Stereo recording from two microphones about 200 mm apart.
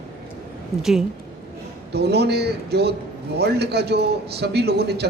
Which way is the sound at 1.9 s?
55° right (ahead or behind).